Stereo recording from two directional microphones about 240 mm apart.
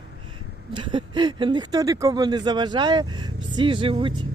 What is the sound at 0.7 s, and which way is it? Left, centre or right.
Speech, centre.